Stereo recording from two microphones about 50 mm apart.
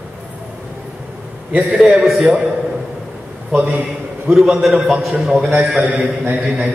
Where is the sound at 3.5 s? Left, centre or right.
Right.